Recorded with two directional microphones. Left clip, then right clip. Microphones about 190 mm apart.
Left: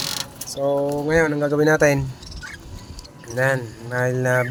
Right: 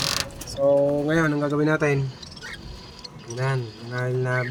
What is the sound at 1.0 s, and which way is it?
Speech, 20° left (ahead or behind).